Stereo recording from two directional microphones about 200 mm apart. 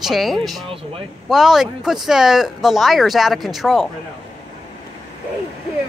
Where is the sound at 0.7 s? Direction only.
25° right (ahead or behind).